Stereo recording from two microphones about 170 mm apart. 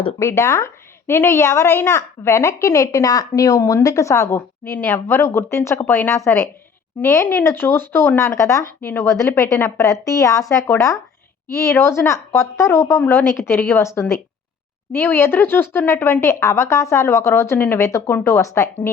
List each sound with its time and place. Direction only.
0.2 s a woman's voice: 15° left (ahead or behind)